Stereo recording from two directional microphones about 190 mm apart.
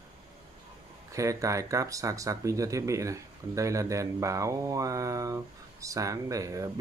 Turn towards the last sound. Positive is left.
turn(degrees=-15)  # may be behind; listen again after turning